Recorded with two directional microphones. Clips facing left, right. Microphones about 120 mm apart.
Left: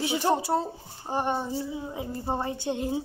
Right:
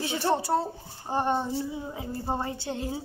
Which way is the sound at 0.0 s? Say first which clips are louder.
Left 1 dB; 15° left (ahead or behind).